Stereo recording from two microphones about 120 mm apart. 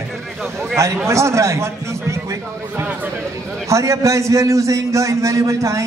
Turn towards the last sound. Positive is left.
turn(degrees=-25)  # may be behind; listen again after turning